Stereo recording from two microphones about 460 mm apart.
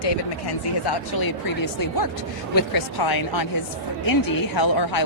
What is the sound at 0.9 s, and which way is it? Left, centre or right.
Speech, left.